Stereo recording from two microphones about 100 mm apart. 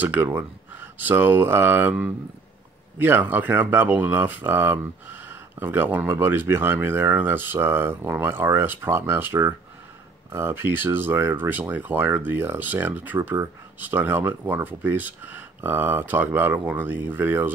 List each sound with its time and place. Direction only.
0.0 s speech: 20° right (ahead or behind)